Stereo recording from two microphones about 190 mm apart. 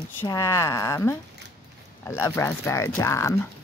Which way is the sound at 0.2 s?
15° left (ahead or behind).